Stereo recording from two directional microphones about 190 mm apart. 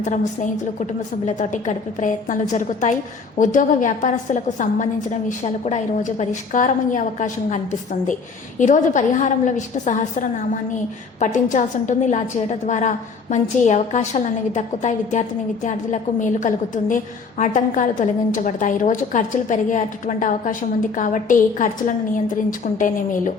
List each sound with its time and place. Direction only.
0.0 s a woman's voice: 40° left (ahead or behind)